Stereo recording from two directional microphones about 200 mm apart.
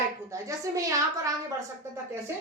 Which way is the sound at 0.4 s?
15° right (ahead or behind).